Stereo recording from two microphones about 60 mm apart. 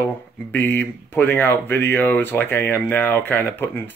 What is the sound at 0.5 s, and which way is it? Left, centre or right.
A man's voice, left.